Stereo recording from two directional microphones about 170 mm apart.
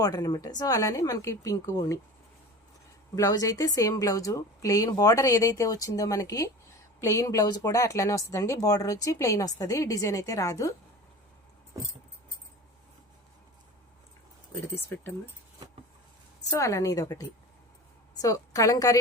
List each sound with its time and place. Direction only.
0.0 s speech: 20° left (ahead or behind)
3.2 s speech: 20° left (ahead or behind)
14.9 s speech: 15° left (ahead or behind)
16.5 s speech: 20° left (ahead or behind)